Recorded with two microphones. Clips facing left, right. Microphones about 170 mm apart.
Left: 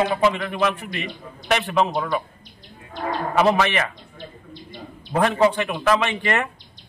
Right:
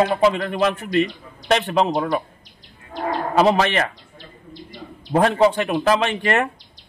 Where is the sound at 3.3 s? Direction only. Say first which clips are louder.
Right 2 dB; 35° right (ahead or behind).